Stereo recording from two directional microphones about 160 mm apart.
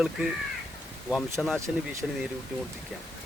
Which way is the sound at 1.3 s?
Centre (ahead or behind).